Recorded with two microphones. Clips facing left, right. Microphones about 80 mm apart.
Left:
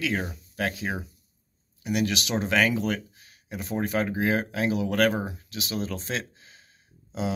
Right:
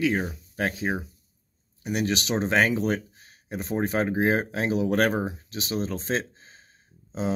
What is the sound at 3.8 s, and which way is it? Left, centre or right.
Speech, right.